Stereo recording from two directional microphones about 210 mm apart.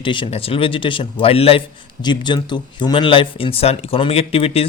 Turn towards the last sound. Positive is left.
turn(degrees=25)  # may be behind; listen again after turning